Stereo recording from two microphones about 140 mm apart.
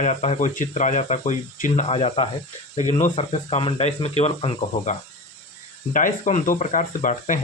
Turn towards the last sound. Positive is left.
turn(degrees=65)  # may be behind; listen again after turning